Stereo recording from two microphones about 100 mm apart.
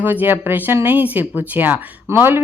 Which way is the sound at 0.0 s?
20° right (ahead or behind).